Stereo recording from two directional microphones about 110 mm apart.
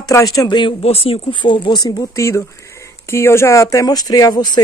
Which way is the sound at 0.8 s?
65° left (ahead or behind).